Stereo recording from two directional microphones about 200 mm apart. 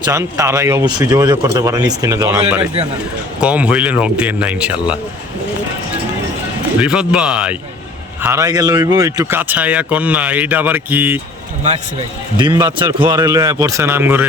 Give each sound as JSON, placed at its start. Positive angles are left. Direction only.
{"t": 0.0, "sound": "a man's voice", "side_deg": -15}
{"t": 3.4, "sound": "a man's voice", "side_deg": -5}
{"t": 6.7, "sound": "a man's voice", "side_deg": -5}
{"t": 12.4, "sound": "a man's voice", "side_deg": -20}